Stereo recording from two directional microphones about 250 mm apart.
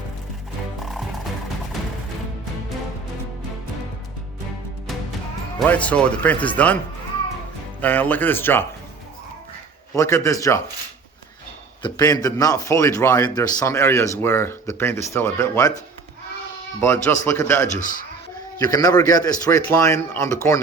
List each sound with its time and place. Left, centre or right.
0.8 s music: centre
5.5 s speech: centre
7.8 s a man's voice: centre
9.9 s a man's voice: centre
11.8 s a man's voice: centre
17.1 s a man's voice: centre
17.7 s a man's voice: left
18.6 s a man's voice: centre